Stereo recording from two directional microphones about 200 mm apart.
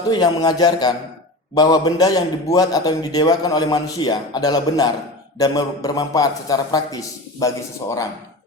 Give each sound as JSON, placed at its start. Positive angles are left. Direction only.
{"t": 0.1, "sound": "a man's voice", "side_deg": 20}